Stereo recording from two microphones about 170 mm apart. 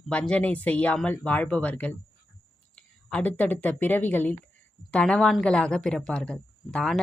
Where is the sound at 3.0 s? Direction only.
5° left (ahead or behind).